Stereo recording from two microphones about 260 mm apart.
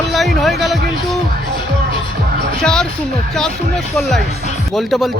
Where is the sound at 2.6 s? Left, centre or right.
Centre.